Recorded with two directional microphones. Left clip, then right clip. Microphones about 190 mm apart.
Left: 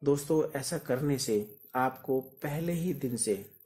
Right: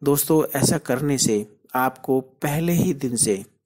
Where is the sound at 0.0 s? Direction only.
40° right (ahead or behind).